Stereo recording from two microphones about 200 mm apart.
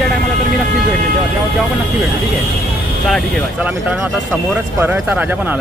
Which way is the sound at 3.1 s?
Centre (ahead or behind).